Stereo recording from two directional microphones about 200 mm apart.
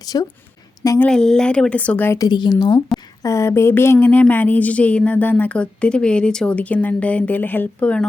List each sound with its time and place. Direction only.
0.0 s a woman's voice: 20° left (ahead or behind)